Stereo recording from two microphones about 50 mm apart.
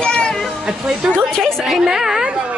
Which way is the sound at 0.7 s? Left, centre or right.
Centre.